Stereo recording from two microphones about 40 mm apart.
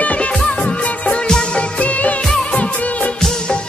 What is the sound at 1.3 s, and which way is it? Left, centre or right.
Music of bollywood, left.